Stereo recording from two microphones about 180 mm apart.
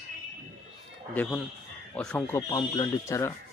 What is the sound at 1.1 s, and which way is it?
Speech, 10° left (ahead or behind).